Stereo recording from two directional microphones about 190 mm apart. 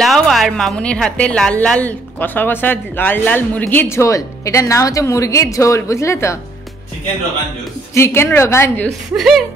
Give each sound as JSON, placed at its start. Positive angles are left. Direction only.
{"t": 0.0, "sound": "a woman's voice", "side_deg": 0}
{"t": 7.9, "sound": "a woman's voice", "side_deg": 15}
{"t": 9.1, "sound": "speech", "side_deg": 0}